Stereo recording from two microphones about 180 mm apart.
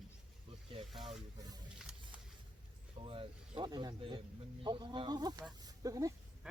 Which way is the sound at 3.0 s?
30° right (ahead or behind).